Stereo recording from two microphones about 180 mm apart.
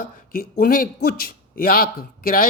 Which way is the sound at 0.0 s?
55° left (ahead or behind).